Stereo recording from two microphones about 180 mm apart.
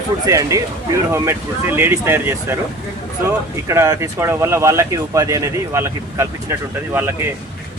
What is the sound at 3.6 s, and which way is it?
Speech, 15° right (ahead or behind).